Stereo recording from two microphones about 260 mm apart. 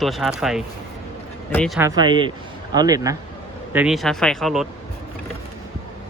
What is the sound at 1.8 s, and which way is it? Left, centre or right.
Speech, centre.